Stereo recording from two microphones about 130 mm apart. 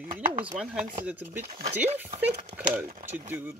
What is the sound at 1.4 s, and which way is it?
Speech, 55° right (ahead or behind).